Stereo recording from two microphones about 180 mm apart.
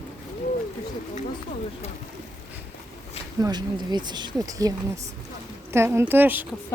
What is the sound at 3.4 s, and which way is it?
Speech, 25° right (ahead or behind).